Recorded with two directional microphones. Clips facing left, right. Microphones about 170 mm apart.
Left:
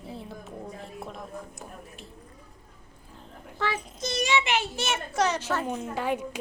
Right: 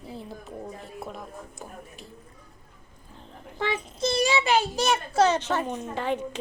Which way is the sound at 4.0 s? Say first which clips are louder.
Right 3 dB; 30° right (ahead or behind).